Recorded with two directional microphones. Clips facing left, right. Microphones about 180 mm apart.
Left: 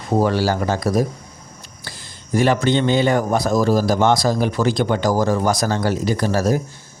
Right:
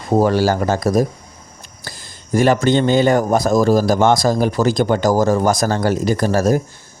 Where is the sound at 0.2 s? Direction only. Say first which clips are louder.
Right 3 dB; 45° right (ahead or behind).